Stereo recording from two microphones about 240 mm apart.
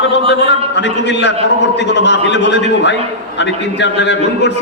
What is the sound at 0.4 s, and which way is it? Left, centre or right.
A man's voice, left.